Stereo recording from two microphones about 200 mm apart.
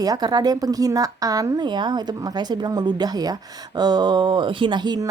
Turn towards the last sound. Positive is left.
turn(degrees=-20)  # may be behind; listen again after turning